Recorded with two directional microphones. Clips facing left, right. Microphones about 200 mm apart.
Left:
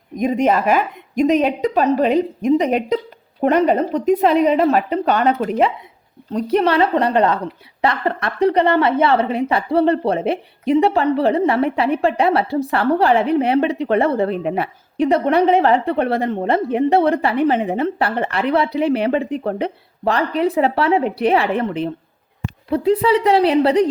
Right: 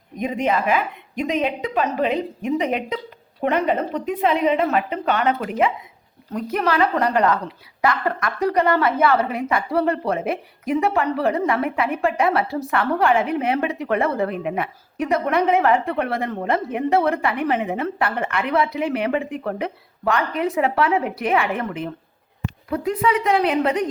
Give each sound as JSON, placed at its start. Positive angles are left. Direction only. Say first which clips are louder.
{"t": 0.2, "sound": "a woman's voice", "louder": "left 5 dB", "side_deg": 45}